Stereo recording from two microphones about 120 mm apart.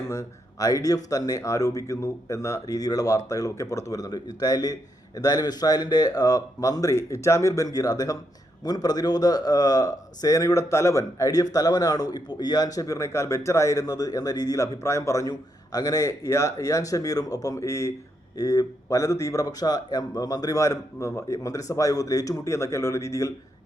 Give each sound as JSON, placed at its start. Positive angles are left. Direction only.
{"t": 0.1, "sound": "a man's voice", "side_deg": 25}